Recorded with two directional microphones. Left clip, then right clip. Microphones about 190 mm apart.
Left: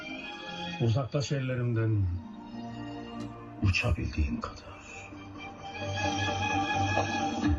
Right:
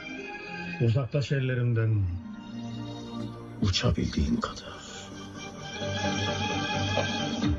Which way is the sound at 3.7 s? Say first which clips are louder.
Right 2 dB; 65° right (ahead or behind).